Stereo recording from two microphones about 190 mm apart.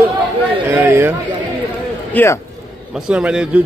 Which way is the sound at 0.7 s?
15° right (ahead or behind).